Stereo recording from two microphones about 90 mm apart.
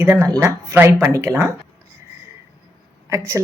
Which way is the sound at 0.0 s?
30° right (ahead or behind).